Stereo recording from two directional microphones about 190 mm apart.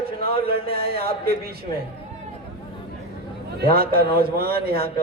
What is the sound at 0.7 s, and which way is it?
Speech, 55° right (ahead or behind).